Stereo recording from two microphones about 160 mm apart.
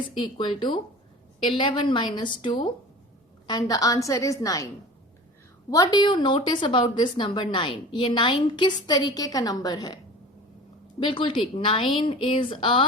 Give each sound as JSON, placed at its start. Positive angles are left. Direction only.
{"t": 0.3, "sound": "a woman's voice", "side_deg": 30}
{"t": 5.7, "sound": "a woman's voice", "side_deg": 25}
{"t": 11.0, "sound": "a woman's voice", "side_deg": 30}